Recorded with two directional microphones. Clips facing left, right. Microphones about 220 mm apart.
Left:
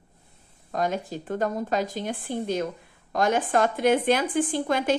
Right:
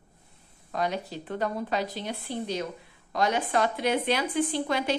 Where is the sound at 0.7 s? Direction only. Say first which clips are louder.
Left 3 dB; 45° left (ahead or behind).